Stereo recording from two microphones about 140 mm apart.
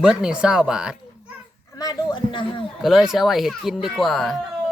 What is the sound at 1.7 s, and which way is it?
Speech, 30° left (ahead or behind).